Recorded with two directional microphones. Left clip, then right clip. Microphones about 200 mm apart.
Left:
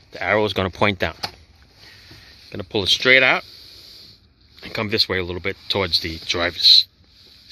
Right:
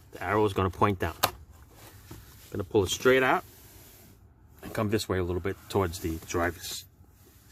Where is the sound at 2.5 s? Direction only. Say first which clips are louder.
Left 7 dB; 10° left (ahead or behind).